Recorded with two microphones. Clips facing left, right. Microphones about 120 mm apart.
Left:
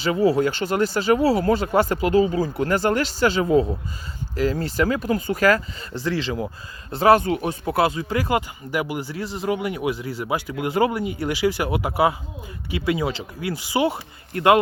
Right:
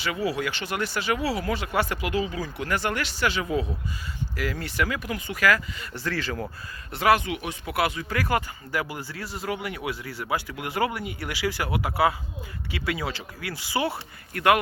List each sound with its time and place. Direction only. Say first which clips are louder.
0.0 s speech: left 9 dB; 30° left (ahead or behind)
0.3 s speech: left 8 dB; 40° left (ahead or behind)
1.5 s speech: left 7 dB; 40° left (ahead or behind)
6.0 s speech: left 5 dB; 20° left (ahead or behind)
6.9 s speech: left 6 dB; 35° left (ahead or behind)